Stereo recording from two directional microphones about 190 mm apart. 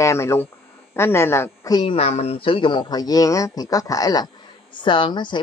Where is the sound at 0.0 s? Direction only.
15° left (ahead or behind).